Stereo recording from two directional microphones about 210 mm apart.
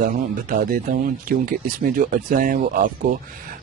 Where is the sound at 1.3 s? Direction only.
40° right (ahead or behind).